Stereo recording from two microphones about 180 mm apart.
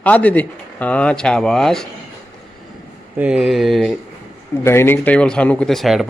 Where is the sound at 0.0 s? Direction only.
10° left (ahead or behind).